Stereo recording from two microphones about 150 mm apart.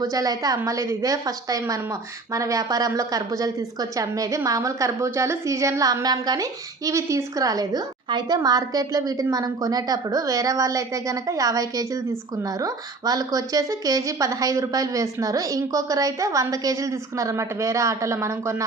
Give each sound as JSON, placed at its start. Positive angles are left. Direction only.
{"t": 0.0, "sound": "a woman's voice", "side_deg": -25}